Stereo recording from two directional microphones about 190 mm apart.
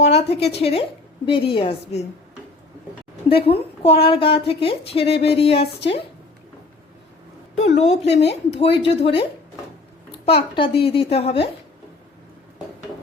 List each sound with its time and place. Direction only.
0.0 s a woman's voice: 30° left (ahead or behind)
3.2 s a woman's voice: 30° left (ahead or behind)
7.5 s a woman's voice: 35° left (ahead or behind)